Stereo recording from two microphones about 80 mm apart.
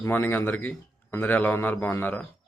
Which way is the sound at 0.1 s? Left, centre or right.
Left.